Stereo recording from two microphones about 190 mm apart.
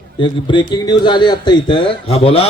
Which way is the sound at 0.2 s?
25° left (ahead or behind).